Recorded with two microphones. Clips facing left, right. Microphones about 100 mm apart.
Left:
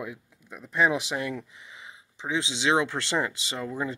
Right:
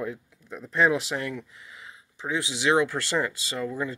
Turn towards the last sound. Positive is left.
turn(degrees=20)  # may be behind; listen again after turning